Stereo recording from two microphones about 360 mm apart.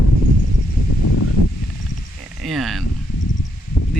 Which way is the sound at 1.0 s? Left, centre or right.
Left.